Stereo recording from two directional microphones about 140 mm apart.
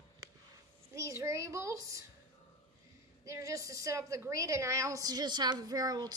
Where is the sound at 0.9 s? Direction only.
20° right (ahead or behind).